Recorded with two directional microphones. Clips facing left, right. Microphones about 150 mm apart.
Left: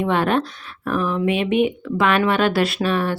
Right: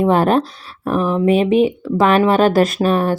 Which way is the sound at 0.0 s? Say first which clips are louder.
Right 5 dB; 40° right (ahead or behind).